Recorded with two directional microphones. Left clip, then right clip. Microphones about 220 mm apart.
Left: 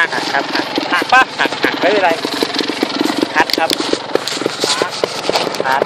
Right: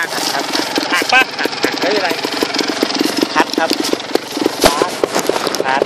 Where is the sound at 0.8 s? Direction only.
15° right (ahead or behind).